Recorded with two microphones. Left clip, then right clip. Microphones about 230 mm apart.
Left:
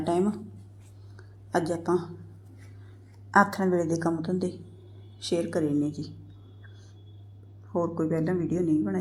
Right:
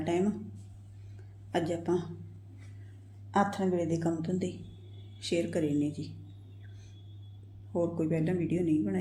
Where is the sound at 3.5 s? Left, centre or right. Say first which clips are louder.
Left 5 dB; left.